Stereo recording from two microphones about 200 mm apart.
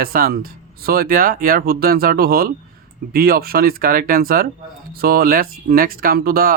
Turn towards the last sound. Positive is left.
turn(degrees=-50)  # may be behind; listen again after turning